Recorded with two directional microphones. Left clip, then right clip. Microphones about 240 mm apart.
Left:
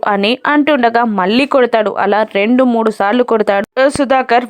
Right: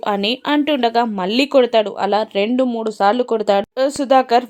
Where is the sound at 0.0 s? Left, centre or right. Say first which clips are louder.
Left 6 dB; centre.